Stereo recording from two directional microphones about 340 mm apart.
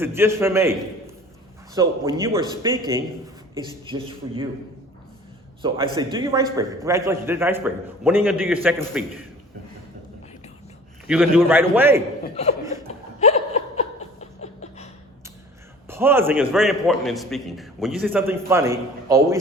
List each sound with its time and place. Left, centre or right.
0.0 s a man's voice: centre
3.8 s a man's voice: centre
5.6 s a man's voice: centre
11.1 s a man's voice: centre
12.2 s chuckle: centre
13.1 s laughter: centre
14.4 s a sound: centre
15.9 s a man's voice: centre